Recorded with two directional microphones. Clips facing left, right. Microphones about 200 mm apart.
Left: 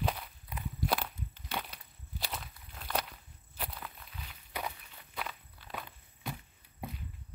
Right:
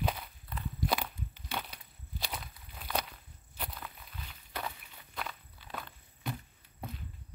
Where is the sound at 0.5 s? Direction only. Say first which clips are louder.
Even; 15° left (ahead or behind).